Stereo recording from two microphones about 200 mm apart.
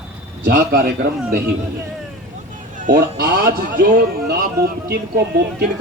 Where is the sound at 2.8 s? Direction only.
45° right (ahead or behind).